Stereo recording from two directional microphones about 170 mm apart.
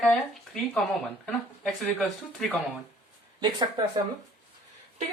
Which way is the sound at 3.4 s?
25° right (ahead or behind).